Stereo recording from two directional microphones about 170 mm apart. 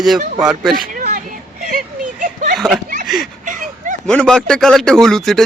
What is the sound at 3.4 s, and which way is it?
Dog, 50° right (ahead or behind).